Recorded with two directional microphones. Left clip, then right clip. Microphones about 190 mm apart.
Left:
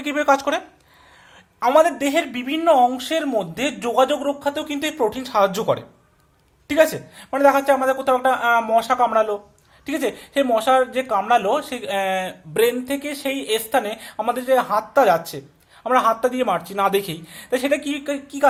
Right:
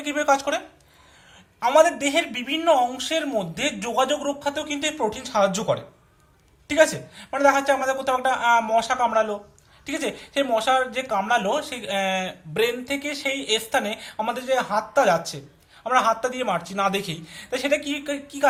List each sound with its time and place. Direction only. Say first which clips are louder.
0.0 s speech: left 3 dB; 50° left (ahead or behind)